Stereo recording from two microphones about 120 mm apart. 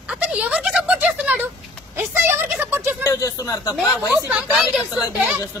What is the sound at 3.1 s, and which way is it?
Speech, 25° left (ahead or behind).